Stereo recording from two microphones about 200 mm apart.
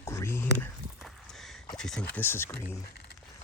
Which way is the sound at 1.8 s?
5° left (ahead or behind).